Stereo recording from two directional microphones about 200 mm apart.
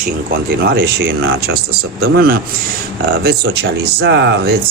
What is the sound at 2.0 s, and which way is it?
Speech, 50° right (ahead or behind).